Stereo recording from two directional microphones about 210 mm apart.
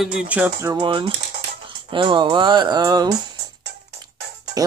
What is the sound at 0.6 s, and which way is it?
Speech, 20° right (ahead or behind).